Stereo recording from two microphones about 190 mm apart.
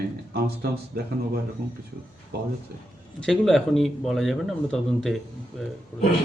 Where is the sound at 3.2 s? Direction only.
Centre (ahead or behind).